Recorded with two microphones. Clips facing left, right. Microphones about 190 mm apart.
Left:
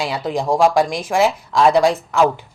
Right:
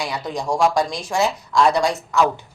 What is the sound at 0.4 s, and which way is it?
Speech, 55° left (ahead or behind).